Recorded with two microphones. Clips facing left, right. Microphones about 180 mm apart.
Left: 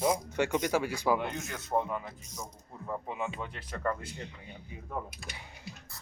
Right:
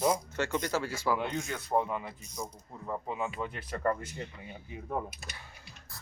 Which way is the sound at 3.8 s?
20° right (ahead or behind).